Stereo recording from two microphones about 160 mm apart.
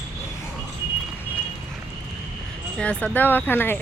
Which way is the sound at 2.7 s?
5° left (ahead or behind).